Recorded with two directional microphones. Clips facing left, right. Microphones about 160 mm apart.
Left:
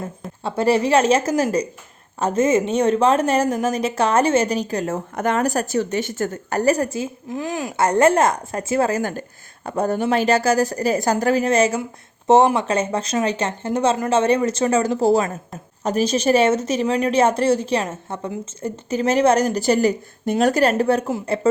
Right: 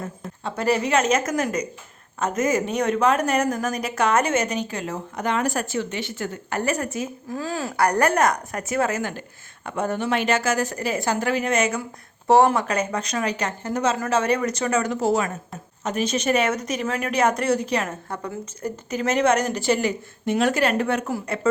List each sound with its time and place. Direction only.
0.4 s a woman's voice: 30° left (ahead or behind)